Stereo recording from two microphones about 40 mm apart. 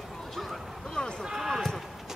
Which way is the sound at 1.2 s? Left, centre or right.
Centre.